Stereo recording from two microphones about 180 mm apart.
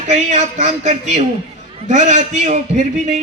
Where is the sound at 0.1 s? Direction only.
40° right (ahead or behind).